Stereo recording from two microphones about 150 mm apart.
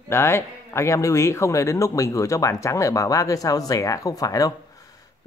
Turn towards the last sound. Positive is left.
turn(degrees=25)  # may be behind; listen again after turning